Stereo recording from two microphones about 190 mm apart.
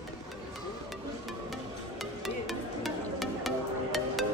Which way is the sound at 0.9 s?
Centre (ahead or behind).